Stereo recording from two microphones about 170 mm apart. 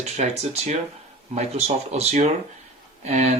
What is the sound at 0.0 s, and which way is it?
Speech, 40° right (ahead or behind).